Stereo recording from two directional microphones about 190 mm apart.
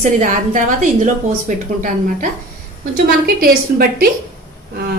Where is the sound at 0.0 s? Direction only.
40° right (ahead or behind).